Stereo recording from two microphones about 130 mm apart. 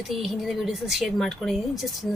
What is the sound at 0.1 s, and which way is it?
Speech, centre (ahead or behind).